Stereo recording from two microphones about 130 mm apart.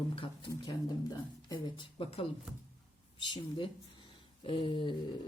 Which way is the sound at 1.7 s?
40° left (ahead or behind).